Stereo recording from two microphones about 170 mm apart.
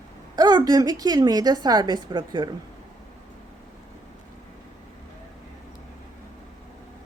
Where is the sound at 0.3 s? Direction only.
25° right (ahead or behind).